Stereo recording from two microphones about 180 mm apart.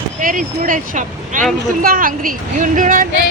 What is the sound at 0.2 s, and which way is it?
Speech, 50° right (ahead or behind).